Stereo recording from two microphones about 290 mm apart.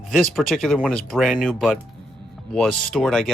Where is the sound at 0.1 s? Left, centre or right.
Centre.